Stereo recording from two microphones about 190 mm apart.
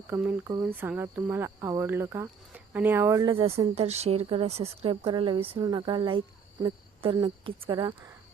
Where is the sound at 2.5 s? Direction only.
10° right (ahead or behind); by 7.9 s 25° right (ahead or behind).